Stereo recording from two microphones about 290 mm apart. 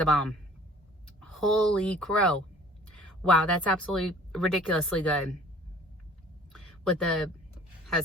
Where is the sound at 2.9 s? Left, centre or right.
Centre.